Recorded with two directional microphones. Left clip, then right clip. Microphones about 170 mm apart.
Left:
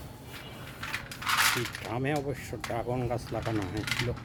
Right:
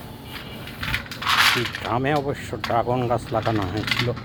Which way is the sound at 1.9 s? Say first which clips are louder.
Right 10 dB; 15° left (ahead or behind).